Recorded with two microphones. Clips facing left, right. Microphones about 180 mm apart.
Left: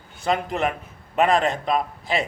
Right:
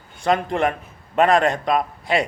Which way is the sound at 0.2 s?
5° left (ahead or behind).